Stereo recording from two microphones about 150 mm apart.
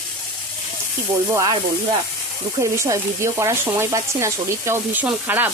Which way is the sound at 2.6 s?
20° right (ahead or behind).